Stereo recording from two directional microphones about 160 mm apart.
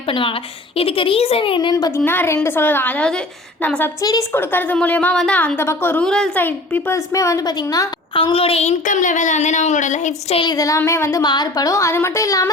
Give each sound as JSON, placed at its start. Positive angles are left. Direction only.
{"t": 0.1, "sound": "a woman's voice", "side_deg": 30}
{"t": 2.0, "sound": "a woman's voice", "side_deg": 15}
{"t": 10.4, "sound": "a woman's voice", "side_deg": 25}